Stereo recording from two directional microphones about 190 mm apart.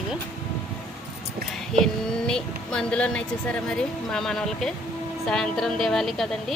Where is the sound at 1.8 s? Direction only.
5° left (ahead or behind).